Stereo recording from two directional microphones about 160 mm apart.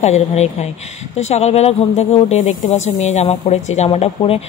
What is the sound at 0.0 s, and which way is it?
Speech, 45° left (ahead or behind).